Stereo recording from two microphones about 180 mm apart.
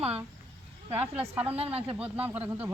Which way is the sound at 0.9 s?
15° right (ahead or behind).